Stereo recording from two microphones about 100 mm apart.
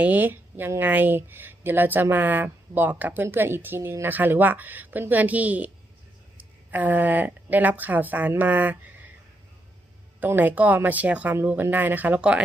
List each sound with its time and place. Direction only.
0.0 s a woman's voice: 15° right (ahead or behind)
10.2 s a woman's voice: 20° right (ahead or behind)